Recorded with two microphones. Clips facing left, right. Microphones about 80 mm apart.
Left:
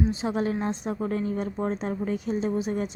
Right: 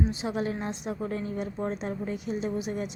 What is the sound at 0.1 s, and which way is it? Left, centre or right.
Speech, left.